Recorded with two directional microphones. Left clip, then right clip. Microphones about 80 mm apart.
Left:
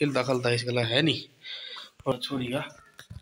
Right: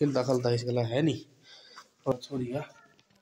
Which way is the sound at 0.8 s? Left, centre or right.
Right.